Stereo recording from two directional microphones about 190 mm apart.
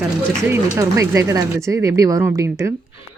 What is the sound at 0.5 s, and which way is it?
A woman's voice, 15° right (ahead or behind).